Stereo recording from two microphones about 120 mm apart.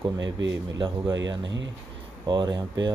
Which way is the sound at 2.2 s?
35° right (ahead or behind).